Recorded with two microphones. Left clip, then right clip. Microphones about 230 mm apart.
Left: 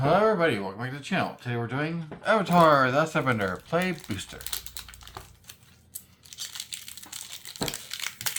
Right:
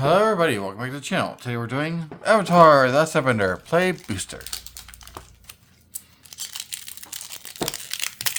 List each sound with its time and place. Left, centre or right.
0.0 s speech: right